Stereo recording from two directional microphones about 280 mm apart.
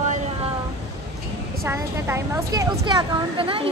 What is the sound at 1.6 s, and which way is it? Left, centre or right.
A child's voice, centre.